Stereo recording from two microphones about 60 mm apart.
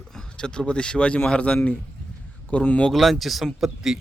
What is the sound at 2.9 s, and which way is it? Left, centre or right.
Speech, centre.